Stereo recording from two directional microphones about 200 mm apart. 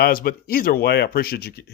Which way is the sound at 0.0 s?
45° left (ahead or behind).